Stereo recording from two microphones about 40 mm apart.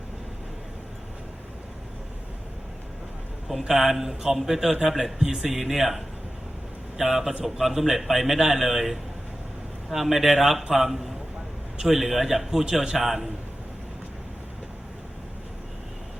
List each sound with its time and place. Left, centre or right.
3.7 s a man's voice: centre
10.8 s a man's voice: centre